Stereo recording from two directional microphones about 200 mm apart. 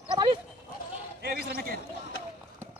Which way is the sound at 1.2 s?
50° right (ahead or behind).